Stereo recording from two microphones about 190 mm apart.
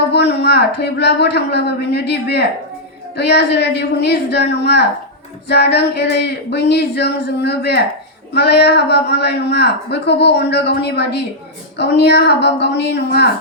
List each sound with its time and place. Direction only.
0.1 s a woman's voice: 60° left (ahead or behind)